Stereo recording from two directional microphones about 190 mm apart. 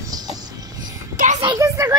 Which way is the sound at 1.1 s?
45° right (ahead or behind).